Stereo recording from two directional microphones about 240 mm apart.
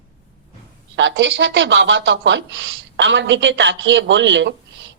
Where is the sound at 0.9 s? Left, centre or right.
Right.